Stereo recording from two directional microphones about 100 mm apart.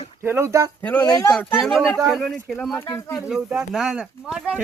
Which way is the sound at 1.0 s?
35° left (ahead or behind).